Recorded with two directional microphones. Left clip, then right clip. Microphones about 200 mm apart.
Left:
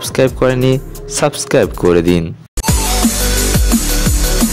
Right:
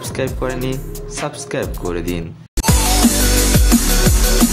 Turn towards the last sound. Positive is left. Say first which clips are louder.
# even
turn(degrees=0)  # may be behind; listen again after turning